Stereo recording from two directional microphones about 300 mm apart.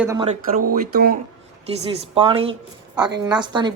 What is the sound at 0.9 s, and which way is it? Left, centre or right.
Speech, right.